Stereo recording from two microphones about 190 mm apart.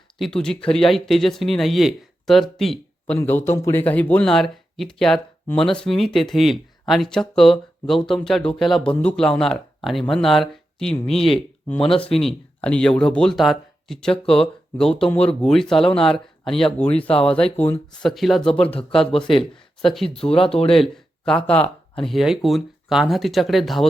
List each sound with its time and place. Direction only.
0.2 s speech: 5° left (ahead or behind)
11.1 s speech: 30° left (ahead or behind)
11.9 s speech: 5° left (ahead or behind)
20.3 s speech: 30° left (ahead or behind)
20.7 s speech: centre (ahead or behind)